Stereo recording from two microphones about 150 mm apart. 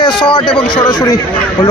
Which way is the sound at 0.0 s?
30° left (ahead or behind).